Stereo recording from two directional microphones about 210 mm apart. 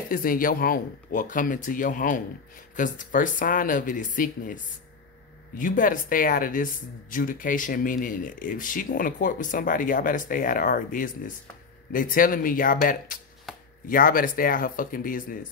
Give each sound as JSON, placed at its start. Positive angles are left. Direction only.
{"t": 0.1, "sound": "speech", "side_deg": 40}
{"t": 13.8, "sound": "speech", "side_deg": 40}